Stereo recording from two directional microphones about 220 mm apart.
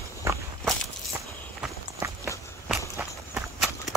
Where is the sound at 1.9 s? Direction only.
15° right (ahead or behind).